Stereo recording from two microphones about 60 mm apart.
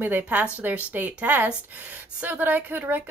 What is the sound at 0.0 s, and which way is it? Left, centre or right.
A woman's voice, right.